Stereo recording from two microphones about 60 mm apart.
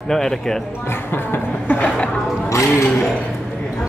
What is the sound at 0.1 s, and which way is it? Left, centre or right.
Speech, centre.